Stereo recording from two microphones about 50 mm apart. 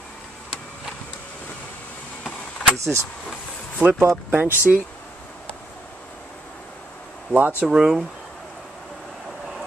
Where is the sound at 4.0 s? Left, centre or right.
Right.